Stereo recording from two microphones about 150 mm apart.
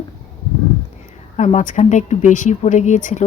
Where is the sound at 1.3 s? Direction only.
50° left (ahead or behind).